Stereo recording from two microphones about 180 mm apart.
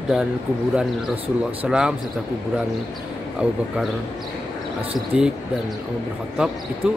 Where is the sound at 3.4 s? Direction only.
5° right (ahead or behind).